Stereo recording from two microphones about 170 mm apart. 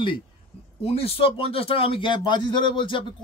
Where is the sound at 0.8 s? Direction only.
35° left (ahead or behind).